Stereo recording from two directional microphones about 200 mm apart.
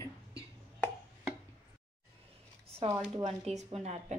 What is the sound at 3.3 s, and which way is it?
Speech, 35° right (ahead or behind).